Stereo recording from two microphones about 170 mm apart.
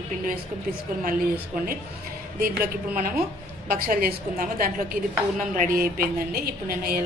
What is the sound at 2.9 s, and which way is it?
A woman's voice, 55° right (ahead or behind).